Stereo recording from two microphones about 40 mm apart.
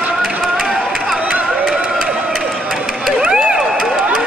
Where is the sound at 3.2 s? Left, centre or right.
Centre.